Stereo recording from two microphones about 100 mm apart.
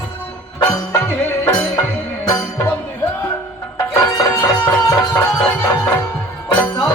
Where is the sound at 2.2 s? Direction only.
35° left (ahead or behind).